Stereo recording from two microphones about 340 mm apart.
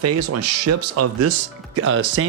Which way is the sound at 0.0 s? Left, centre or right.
Right.